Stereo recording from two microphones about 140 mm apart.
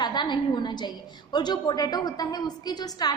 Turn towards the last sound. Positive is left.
turn(degrees=30)  # may be behind; listen again after turning